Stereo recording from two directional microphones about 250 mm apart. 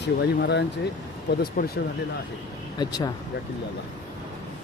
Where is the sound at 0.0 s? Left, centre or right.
Left.